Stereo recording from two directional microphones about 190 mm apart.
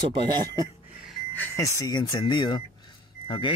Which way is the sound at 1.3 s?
15° left (ahead or behind).